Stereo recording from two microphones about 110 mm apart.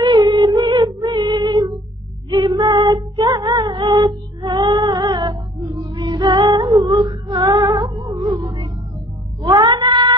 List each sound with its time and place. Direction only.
0.0 s a sound: 45° right (ahead or behind)
1.1 s music: 45° right (ahead or behind)
2.2 s female singing: 40° right (ahead or behind)
7.9 s music: 40° right (ahead or behind)
9.4 s cat: 40° right (ahead or behind)